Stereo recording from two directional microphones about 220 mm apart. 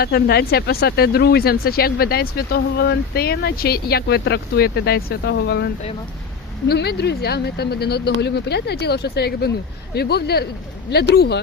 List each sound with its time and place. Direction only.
0.0 s speech: 45° left (ahead or behind)